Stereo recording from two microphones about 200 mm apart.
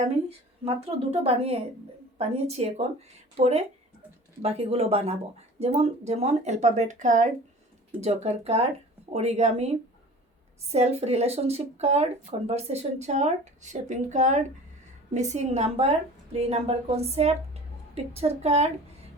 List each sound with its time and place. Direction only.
0.0 s a woman's voice: 30° right (ahead or behind)